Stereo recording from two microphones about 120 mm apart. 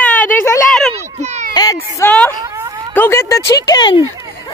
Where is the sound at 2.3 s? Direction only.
30° right (ahead or behind).